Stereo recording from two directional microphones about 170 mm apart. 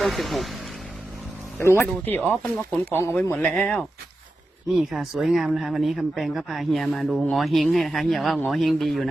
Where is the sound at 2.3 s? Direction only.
5° left (ahead or behind).